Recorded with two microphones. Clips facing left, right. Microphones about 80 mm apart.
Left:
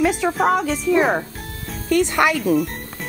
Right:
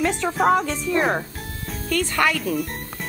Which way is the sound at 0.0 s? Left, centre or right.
Centre.